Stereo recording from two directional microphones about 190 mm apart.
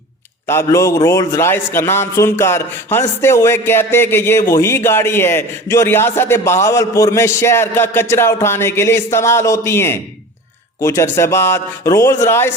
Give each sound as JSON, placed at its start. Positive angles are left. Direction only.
{"t": 0.4, "sound": "speech", "side_deg": 15}